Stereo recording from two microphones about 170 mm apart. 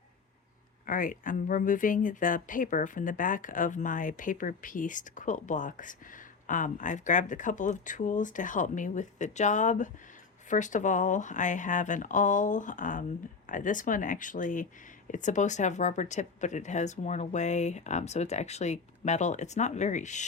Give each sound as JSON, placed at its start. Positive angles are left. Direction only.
{"t": 0.9, "sound": "speech", "side_deg": 55}